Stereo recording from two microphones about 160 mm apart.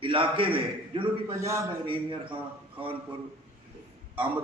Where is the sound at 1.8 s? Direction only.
30° right (ahead or behind).